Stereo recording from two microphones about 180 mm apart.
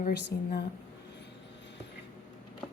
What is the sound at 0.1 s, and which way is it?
Speech, 70° left (ahead or behind).